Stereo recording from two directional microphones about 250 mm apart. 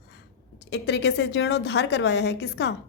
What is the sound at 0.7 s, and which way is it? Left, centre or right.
A woman's voice, left.